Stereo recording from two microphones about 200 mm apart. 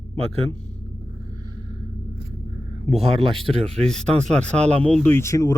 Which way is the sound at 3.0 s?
30° right (ahead or behind).